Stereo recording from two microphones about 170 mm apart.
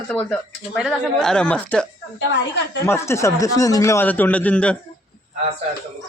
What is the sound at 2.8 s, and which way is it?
A man's voice, 15° left (ahead or behind).